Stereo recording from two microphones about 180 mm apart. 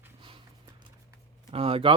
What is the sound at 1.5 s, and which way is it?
Speech, 30° right (ahead or behind).